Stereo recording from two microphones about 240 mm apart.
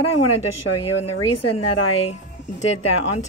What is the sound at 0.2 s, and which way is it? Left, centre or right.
Speech, left.